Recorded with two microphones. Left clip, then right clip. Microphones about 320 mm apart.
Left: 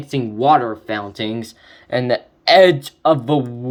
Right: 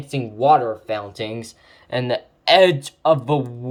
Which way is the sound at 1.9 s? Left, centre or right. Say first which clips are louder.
Left 4 dB; right.